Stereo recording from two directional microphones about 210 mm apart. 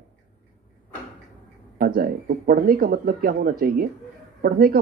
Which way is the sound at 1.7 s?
45° right (ahead or behind).